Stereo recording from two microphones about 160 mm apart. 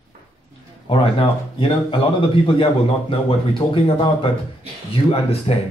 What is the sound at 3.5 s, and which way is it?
Speech, 35° left (ahead or behind).